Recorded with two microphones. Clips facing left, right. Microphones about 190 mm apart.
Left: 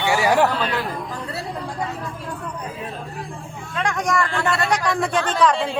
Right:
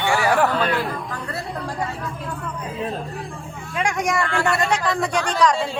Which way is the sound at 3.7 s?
20° right (ahead or behind).